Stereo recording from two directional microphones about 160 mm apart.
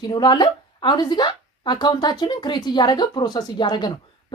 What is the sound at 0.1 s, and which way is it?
Speech, 25° left (ahead or behind).